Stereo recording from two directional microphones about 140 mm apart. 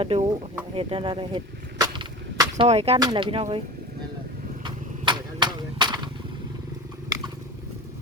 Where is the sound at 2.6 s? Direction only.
50° right (ahead or behind).